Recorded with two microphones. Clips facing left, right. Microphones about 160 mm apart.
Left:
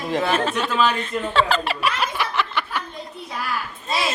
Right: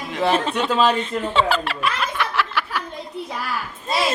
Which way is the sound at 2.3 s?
5° right (ahead or behind).